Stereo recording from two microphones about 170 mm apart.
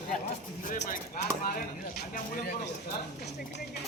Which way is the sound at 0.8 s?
50° left (ahead or behind).